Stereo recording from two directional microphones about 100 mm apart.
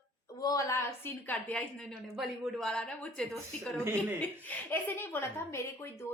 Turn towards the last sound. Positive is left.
turn(degrees=30)  # may be behind; listen again after turning